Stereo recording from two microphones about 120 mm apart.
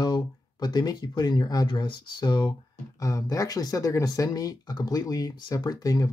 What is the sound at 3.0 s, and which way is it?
Speech, 30° left (ahead or behind).